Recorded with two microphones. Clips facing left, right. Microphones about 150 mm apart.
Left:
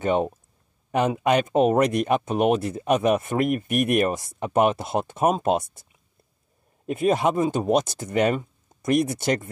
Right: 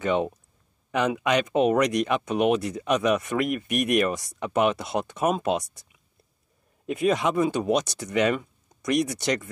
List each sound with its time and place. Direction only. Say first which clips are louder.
0.0 s speech: left 2 dB; 45° left (ahead or behind)
6.9 s speech: left 2 dB; 50° left (ahead or behind)